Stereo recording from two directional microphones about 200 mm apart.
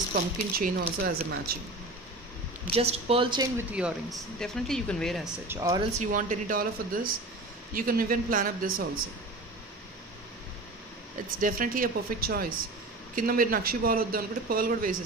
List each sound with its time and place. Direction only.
0.1 s a man's voice: 50° right (ahead or behind)
2.7 s speech: 30° right (ahead or behind)
3.5 s speech: 5° right (ahead or behind)
5.5 s speech: 15° right (ahead or behind)
5.9 s a man's voice: 40° right (ahead or behind)
11.2 s a man's voice: 45° right (ahead or behind)